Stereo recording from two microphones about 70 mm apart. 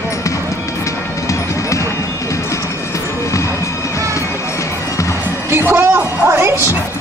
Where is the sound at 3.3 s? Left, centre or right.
Left.